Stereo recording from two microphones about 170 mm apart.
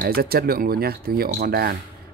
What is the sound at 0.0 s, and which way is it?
Speech, 65° right (ahead or behind).